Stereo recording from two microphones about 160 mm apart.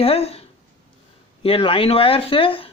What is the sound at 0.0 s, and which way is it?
Speech, 40° left (ahead or behind).